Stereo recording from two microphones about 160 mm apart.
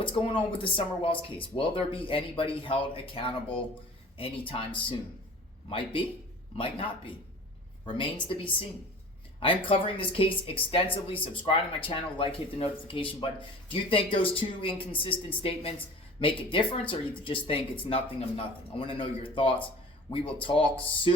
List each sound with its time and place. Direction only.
0.0 s speech: 30° left (ahead or behind)
5.6 s speech: 30° left (ahead or behind)